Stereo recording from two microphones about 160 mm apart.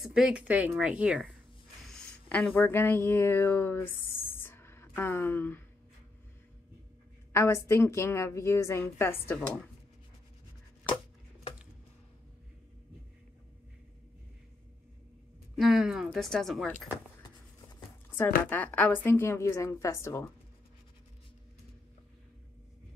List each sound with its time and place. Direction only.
0.0 s speech: 5° right (ahead or behind)
1.9 s a sound: 5° left (ahead or behind)
7.3 s a woman's voice: 15° left (ahead or behind)
15.5 s a woman's voice: centre (ahead or behind)
17.6 s writing: 20° left (ahead or behind)
18.5 s a woman's voice: 10° left (ahead or behind)